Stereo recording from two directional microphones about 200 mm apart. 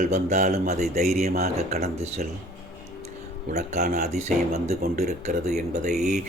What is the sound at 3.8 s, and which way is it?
Speech, 40° right (ahead or behind).